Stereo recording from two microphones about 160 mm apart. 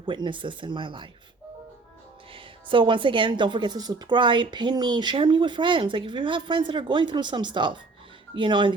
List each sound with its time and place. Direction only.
0.0 s speech: 30° right (ahead or behind)
2.3 s a woman's voice: 30° right (ahead or behind)